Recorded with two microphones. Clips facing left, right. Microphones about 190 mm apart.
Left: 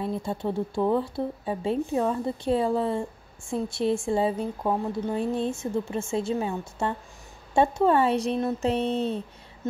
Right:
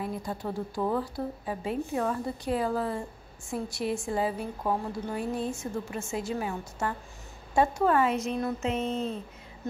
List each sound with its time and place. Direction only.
0.0 s speech: 25° left (ahead or behind)